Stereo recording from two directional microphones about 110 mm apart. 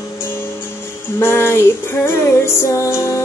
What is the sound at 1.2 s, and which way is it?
Music, 20° left (ahead or behind).